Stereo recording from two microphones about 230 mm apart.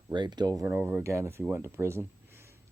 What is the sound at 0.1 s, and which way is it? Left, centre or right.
Speech, centre.